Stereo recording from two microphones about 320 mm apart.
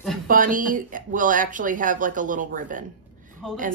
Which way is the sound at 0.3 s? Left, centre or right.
Right.